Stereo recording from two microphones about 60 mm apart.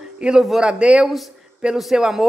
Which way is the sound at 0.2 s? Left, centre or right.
Centre.